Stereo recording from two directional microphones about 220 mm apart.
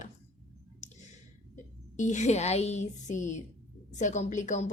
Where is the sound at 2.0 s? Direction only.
35° left (ahead or behind).